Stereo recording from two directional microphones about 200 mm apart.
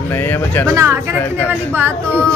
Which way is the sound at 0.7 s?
15° right (ahead or behind).